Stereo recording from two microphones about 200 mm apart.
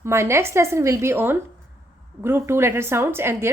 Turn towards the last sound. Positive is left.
turn(degrees=-10)  # may be behind; listen again after turning